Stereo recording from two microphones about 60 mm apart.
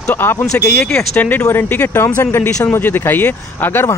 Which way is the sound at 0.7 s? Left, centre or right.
Centre.